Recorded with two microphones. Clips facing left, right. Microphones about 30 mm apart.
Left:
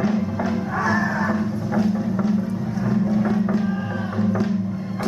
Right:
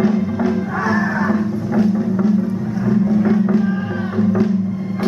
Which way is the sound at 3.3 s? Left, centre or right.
Centre.